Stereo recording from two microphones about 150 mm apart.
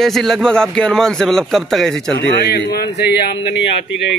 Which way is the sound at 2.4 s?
90° left.